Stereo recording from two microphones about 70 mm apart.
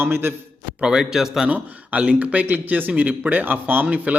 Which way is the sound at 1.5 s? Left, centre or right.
Right.